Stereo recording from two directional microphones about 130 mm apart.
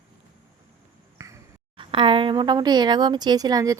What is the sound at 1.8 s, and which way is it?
Speech, 40° right (ahead or behind).